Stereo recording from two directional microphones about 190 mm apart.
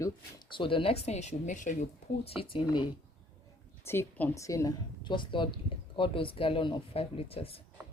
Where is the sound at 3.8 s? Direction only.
10° left (ahead or behind); by 7.6 s 30° left (ahead or behind).